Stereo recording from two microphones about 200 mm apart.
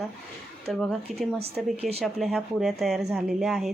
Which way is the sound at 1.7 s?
30° right (ahead or behind).